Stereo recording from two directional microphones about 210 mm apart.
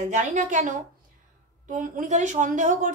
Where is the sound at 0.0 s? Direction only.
35° right (ahead or behind).